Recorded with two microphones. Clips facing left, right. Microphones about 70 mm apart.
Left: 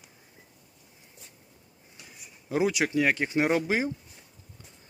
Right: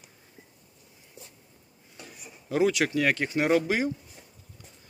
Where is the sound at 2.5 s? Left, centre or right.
Centre.